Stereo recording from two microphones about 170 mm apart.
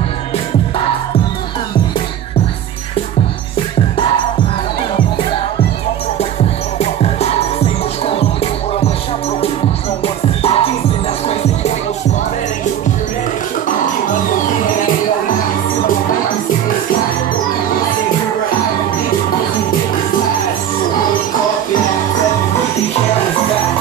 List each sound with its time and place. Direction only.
6.8 s music: 35° left (ahead or behind)
10.0 s music: 35° left (ahead or behind)